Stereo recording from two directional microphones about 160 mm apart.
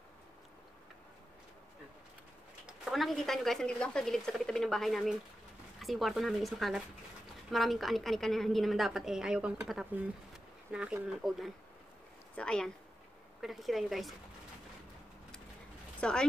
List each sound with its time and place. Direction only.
2.6 s speech: centre (ahead or behind)
16.0 s speech: 5° left (ahead or behind)